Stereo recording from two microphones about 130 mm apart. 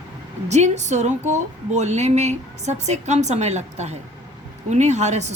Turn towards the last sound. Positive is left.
turn(degrees=-60)  # may be behind; listen again after turning